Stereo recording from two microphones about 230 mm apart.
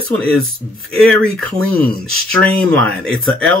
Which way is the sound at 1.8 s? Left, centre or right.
Right.